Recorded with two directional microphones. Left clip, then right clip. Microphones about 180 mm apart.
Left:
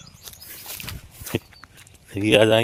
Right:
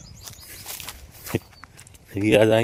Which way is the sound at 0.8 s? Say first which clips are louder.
Even; centre (ahead or behind).